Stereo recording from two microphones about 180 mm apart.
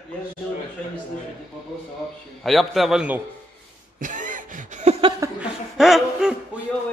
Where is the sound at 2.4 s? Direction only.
Centre (ahead or behind).